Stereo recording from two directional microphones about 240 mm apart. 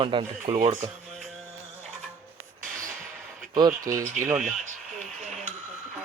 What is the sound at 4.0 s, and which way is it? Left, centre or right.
Speech, right.